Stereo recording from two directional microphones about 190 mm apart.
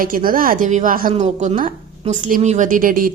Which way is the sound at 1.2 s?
35° right (ahead or behind).